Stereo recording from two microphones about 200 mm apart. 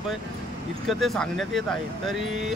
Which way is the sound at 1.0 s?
Centre (ahead or behind).